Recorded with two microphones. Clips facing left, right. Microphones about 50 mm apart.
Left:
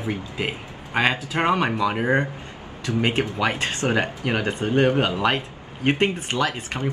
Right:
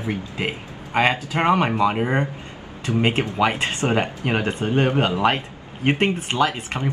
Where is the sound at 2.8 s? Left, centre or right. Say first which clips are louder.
Right 2 dB; right.